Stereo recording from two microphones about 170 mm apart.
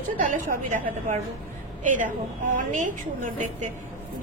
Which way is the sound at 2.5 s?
50° right (ahead or behind).